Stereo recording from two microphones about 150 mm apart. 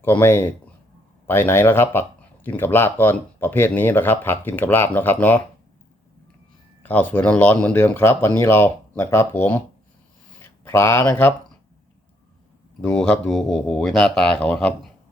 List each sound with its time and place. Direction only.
0.0 s speech: 15° left (ahead or behind)
6.8 s speech: 10° left (ahead or behind)
12.8 s speech: 5° left (ahead or behind)